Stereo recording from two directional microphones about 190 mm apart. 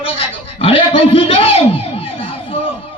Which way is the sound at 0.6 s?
30° left (ahead or behind).